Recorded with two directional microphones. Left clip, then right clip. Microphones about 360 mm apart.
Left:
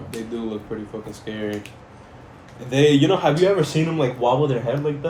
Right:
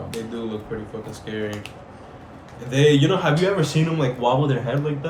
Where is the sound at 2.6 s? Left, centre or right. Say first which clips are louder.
Left 1 dB; centre.